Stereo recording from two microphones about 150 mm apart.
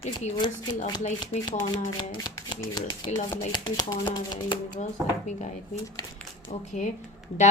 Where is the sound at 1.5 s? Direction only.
30° left (ahead or behind).